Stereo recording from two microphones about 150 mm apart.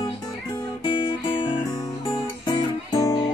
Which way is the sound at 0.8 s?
35° left (ahead or behind).